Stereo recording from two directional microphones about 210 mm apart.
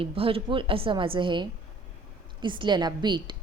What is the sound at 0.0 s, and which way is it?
A woman's voice, 25° right (ahead or behind).